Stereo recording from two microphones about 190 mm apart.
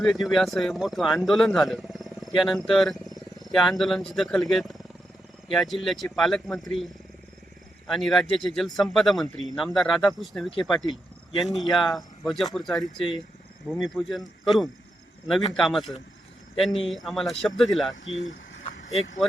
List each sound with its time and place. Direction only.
0.0 s a man's voice: centre (ahead or behind)
7.9 s a man's voice: centre (ahead or behind)
10.7 s speech: 20° left (ahead or behind)
11.3 s a man's voice: centre (ahead or behind)
13.0 s speech: 25° left (ahead or behind)
13.9 s a man's voice: centre (ahead or behind)
18.0 s speech: 90° left